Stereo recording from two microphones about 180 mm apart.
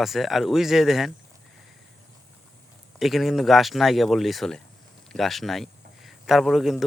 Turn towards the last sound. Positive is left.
turn(degrees=0)  # may be behind; listen again after turning